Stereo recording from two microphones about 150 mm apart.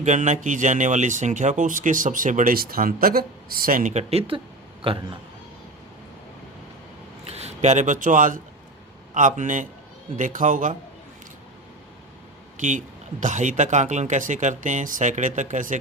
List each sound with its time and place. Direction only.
0.0 s speech: 55° right (ahead or behind)
7.3 s speech: 45° right (ahead or behind)
12.5 s speech: 55° right (ahead or behind)